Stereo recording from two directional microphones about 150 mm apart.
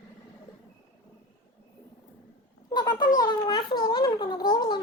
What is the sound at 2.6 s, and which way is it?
Cat, 30° left (ahead or behind).